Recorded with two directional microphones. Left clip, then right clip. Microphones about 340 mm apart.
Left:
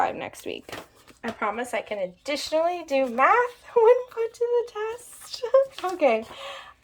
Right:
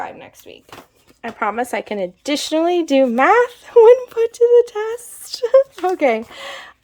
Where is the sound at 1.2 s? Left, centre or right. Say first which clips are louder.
Right 7 dB; centre.